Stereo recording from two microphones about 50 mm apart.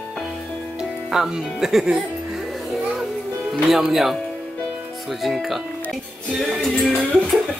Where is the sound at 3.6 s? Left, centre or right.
Centre.